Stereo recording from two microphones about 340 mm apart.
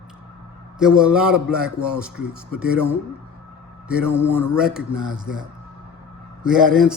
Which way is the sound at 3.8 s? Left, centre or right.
Centre.